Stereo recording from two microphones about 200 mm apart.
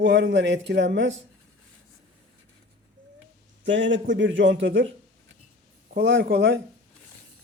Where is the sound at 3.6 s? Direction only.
70° right (ahead or behind).